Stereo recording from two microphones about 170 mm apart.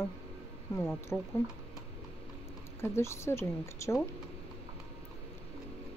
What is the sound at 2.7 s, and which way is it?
Speech, 15° left (ahead or behind).